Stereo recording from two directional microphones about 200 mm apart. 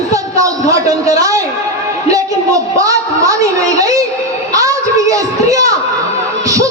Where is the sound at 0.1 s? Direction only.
15° right (ahead or behind).